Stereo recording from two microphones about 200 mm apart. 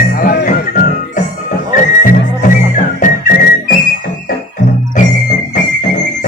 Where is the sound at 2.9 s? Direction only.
40° left (ahead or behind).